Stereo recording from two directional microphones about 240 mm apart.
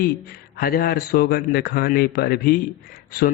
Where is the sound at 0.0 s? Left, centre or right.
Left.